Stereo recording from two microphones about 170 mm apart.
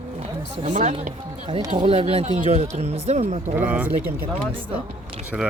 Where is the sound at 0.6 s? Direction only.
50° right (ahead or behind).